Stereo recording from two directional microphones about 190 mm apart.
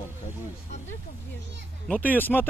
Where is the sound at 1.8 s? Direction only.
5° left (ahead or behind).